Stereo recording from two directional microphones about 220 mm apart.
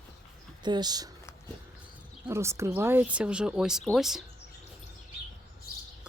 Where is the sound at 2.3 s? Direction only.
10° right (ahead or behind).